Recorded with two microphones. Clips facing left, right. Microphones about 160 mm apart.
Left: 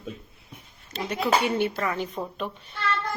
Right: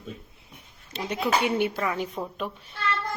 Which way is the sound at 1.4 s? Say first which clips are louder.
Even; 10° right (ahead or behind).